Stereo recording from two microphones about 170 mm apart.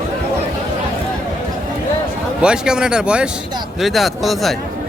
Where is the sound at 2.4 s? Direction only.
5° right (ahead or behind).